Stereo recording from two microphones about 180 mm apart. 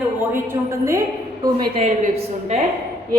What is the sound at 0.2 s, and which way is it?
A woman's voice, 15° right (ahead or behind).